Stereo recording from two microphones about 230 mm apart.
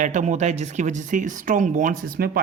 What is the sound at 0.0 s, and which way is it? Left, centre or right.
Speech, right.